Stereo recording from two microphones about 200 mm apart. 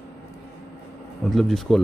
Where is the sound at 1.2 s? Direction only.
Centre (ahead or behind).